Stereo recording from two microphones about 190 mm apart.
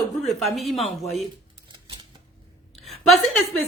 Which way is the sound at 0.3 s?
Centre (ahead or behind).